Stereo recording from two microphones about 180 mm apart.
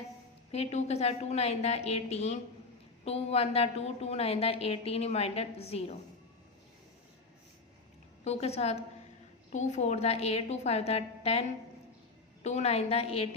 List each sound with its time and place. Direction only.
0.5 s a woman's voice: 35° left (ahead or behind)
8.2 s a woman's voice: 35° left (ahead or behind)